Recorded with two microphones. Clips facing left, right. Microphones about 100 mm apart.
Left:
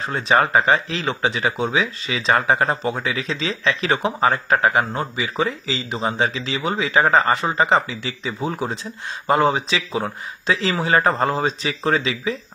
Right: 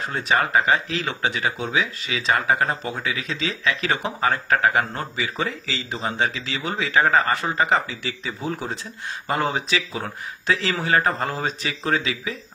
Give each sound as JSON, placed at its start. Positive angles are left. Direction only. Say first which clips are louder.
{"t": 0.0, "sound": "speech", "louder": "left 4 dB", "side_deg": 25}